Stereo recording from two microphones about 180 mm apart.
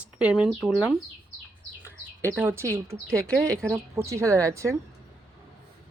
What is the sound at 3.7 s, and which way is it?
Speech, 15° right (ahead or behind).